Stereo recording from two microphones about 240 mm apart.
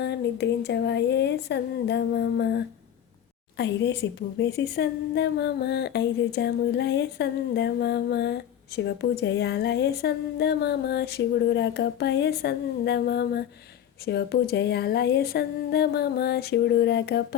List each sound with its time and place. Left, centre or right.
0.0 s a woman's voice: left
3.6 s a woman's voice: left